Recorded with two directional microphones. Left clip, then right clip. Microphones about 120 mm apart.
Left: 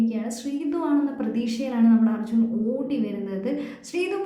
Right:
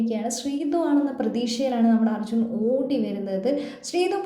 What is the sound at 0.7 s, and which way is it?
A woman's voice, 20° right (ahead or behind).